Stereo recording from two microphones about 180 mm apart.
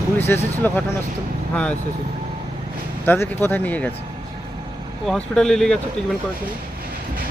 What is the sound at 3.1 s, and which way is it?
Speech, 10° left (ahead or behind).